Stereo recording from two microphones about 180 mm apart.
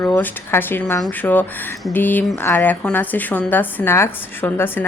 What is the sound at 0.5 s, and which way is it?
A woman's voice, 10° left (ahead or behind).